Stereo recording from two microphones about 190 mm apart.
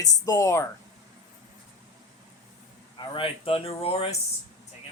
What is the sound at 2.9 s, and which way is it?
Speech, 25° left (ahead or behind).